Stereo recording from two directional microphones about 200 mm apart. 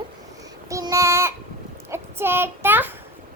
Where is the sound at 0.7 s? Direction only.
15° right (ahead or behind).